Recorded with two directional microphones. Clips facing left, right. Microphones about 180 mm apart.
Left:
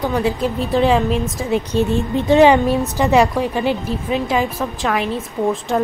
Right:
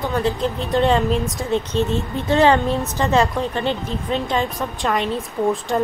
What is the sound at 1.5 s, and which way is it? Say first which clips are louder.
A woman's voice: left 3 dB; 15° left (ahead or behind).